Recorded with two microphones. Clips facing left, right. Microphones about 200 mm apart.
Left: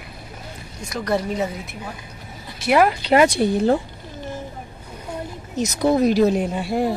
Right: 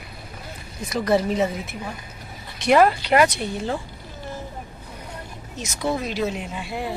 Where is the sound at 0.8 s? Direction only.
Centre (ahead or behind).